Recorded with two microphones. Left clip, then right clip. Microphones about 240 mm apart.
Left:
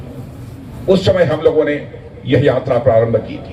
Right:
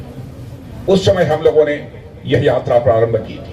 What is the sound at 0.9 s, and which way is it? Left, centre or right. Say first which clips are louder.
A man's voice: even; right.